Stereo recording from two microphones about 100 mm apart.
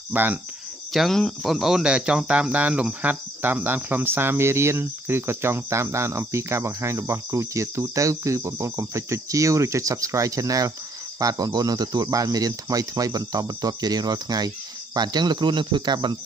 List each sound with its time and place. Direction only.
0.1 s speech: 20° right (ahead or behind)
0.9 s speech: 5° left (ahead or behind); by 16.2 s 45° right (ahead or behind)